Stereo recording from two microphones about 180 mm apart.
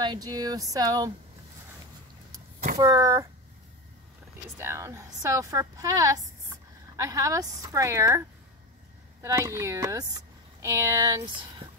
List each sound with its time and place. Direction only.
0.0 s a woman's voice: 20° right (ahead or behind)
2.8 s a woman's voice: 20° right (ahead or behind)
4.6 s a woman's voice: 15° right (ahead or behind)
9.2 s a woman's voice: 15° right (ahead or behind)